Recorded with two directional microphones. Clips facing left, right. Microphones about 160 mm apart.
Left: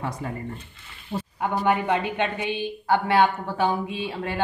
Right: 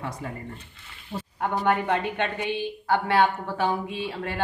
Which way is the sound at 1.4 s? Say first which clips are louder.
Left 1 dB; 10° left (ahead or behind).